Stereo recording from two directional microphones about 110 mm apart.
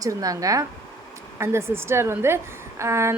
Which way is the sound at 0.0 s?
35° right (ahead or behind).